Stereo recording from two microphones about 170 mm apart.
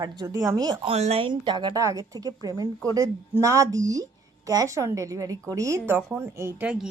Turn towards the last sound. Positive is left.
turn(degrees=-5)  # may be behind; listen again after turning